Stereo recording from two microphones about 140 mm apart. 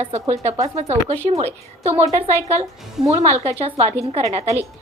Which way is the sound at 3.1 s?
50° right (ahead or behind).